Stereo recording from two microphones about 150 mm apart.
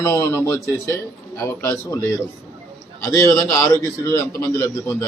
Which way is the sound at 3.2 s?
20° left (ahead or behind).